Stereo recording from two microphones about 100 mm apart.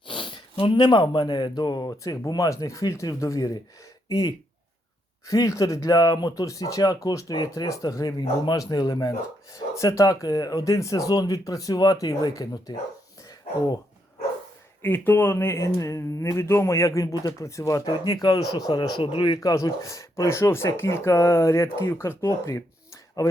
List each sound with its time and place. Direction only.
0.1 s speech: 55° left (ahead or behind); by 3.6 s 35° left (ahead or behind)
5.3 s speech: 35° left (ahead or behind)
14.8 s speech: 20° left (ahead or behind)